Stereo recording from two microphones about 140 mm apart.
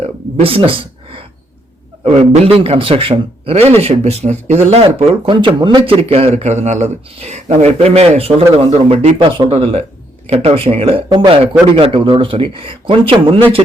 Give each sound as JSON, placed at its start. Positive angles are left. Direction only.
{"t": 0.4, "sound": "a man's voice", "side_deg": -40}
{"t": 9.1, "sound": "a man's voice", "side_deg": -35}